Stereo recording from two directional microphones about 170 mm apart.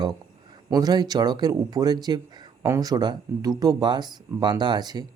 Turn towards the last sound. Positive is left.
turn(degrees=-25)  # may be behind; listen again after turning